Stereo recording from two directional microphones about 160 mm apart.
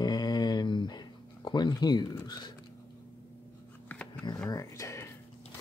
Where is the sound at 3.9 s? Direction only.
10° left (ahead or behind).